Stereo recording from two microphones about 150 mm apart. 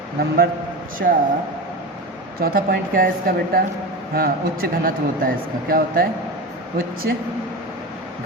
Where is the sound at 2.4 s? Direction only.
80° right.